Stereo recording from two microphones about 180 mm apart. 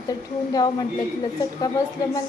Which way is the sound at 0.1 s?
20° left (ahead or behind).